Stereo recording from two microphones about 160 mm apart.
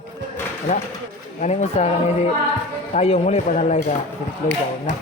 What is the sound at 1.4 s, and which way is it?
A man's voice, 45° left (ahead or behind).